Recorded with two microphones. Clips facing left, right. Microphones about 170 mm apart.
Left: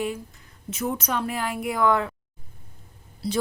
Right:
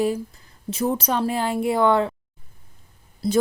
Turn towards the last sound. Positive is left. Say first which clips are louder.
# right 6 dB
turn(degrees=-45)  # may be behind; listen again after turning